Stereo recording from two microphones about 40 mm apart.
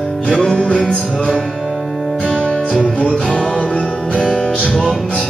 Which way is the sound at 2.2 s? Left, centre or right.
Left.